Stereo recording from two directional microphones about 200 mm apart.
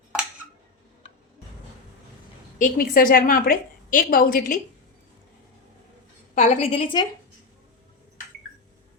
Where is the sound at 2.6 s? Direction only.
45° left (ahead or behind).